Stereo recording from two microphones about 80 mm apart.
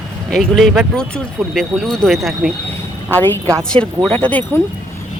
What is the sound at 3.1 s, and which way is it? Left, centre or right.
Speech, left.